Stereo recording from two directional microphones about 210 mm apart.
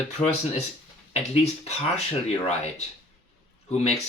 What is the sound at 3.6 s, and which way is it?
Speech, 30° left (ahead or behind).